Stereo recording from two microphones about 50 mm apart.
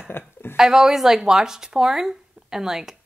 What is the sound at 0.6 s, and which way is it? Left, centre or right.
Speech, centre.